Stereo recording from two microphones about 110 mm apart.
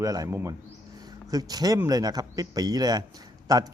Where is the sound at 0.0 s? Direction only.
30° right (ahead or behind).